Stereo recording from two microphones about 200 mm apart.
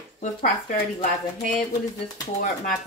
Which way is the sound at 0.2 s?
35° left (ahead or behind).